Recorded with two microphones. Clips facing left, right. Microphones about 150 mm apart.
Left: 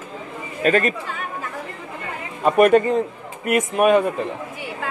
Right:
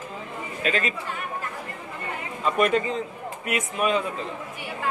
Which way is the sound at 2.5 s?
50° left (ahead or behind).